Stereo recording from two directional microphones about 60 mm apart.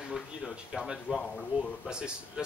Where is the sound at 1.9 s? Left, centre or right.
Centre.